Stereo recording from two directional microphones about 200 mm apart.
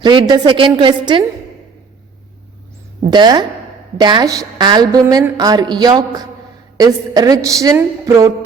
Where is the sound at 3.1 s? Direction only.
20° right (ahead or behind).